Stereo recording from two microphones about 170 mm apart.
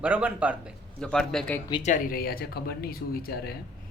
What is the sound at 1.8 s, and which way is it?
Speech, 50° left (ahead or behind).